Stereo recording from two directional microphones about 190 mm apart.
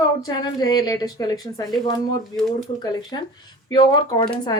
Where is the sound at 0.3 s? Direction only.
20° left (ahead or behind).